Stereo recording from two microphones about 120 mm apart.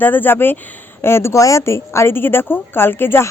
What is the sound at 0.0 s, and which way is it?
Speech, 15° left (ahead or behind).